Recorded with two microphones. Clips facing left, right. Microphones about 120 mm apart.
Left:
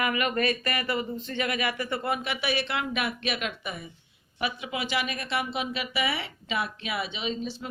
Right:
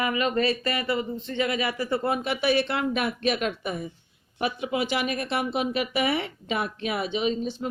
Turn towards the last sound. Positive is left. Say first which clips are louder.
# right 6 dB
turn(degrees=-45)  # may be behind; listen again after turning